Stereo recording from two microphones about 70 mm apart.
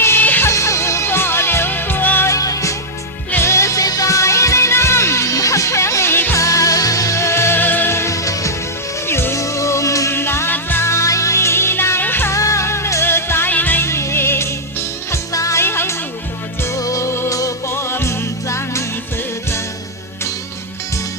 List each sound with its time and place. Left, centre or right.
0.0 s music: left
0.4 s music: left
2.2 s music: left
6.3 s music: left
9.0 s music: left
10.1 s music: left
10.8 s music: left
12.3 s music: left
13.8 s music: left
15.6 s music: left
16.6 s music: left
17.7 s music: left